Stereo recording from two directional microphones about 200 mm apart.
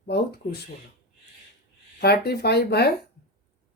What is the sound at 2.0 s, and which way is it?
Speech, 55° left (ahead or behind).